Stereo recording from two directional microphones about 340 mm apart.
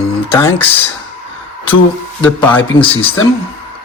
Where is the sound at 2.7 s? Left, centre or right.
Centre.